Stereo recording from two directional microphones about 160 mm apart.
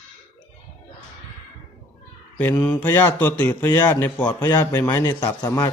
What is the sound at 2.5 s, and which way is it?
Mantra, 25° left (ahead or behind).